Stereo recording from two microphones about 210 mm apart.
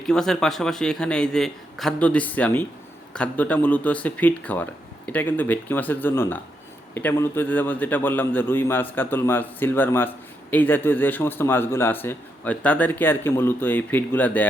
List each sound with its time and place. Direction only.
0.0 s a man's voice: centre (ahead or behind)